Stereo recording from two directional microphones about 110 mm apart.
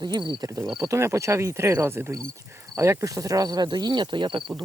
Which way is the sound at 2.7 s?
25° right (ahead or behind).